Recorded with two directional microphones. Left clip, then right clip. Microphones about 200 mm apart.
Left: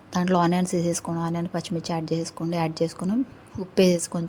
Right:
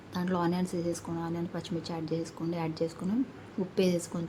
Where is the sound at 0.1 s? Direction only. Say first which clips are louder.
Left 9 dB; 35° left (ahead or behind).